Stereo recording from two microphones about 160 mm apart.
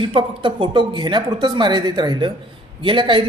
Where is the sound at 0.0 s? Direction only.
30° right (ahead or behind).